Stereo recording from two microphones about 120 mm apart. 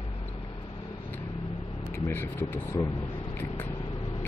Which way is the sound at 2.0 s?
20° left (ahead or behind).